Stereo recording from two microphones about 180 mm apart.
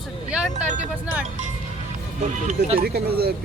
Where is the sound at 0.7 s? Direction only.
40° right (ahead or behind).